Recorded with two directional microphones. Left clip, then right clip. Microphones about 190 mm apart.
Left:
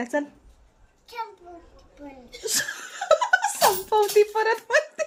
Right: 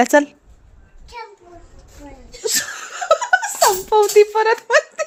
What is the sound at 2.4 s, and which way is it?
Laughter, 45° right (ahead or behind).